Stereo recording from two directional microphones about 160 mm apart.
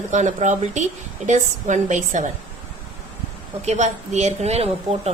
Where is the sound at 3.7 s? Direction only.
45° right (ahead or behind).